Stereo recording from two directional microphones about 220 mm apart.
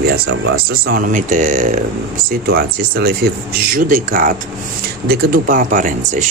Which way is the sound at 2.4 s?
45° right (ahead or behind).